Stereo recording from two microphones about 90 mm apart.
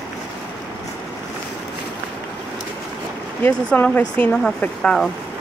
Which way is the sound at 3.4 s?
20° left (ahead or behind).